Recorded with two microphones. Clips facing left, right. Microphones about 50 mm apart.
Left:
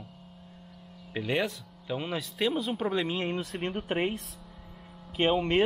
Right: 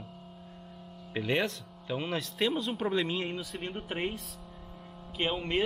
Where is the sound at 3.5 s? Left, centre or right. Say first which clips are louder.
Left 5 dB; centre.